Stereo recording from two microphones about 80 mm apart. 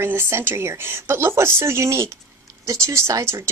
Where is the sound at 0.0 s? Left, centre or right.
Right.